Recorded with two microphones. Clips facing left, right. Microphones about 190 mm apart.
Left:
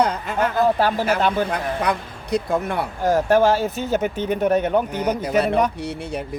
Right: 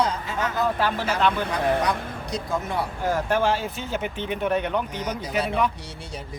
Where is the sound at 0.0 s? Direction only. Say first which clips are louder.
Left 5 dB; 60° left (ahead or behind).